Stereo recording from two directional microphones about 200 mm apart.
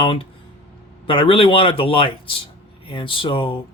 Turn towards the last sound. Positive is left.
turn(degrees=25)  # may be behind; listen again after turning